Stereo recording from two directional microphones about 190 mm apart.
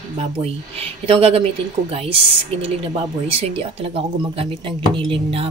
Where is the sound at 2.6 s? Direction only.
30° right (ahead or behind).